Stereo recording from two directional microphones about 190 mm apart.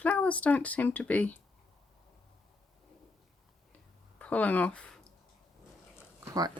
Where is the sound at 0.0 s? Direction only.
10° left (ahead or behind).